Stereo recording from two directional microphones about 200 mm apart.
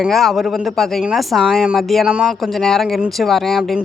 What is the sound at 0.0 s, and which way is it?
Speech, centre (ahead or behind).